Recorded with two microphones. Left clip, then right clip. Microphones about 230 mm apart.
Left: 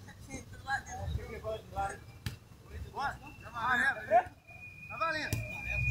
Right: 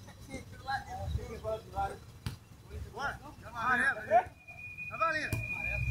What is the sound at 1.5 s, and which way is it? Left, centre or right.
Speech, centre.